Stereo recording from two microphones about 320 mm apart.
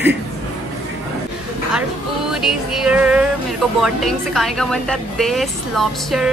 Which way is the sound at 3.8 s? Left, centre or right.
Centre.